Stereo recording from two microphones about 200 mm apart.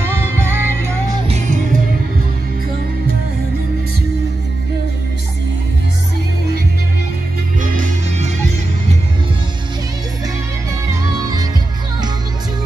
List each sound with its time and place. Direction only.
0.0 s music: 15° right (ahead or behind)
1.2 s music: 30° right (ahead or behind)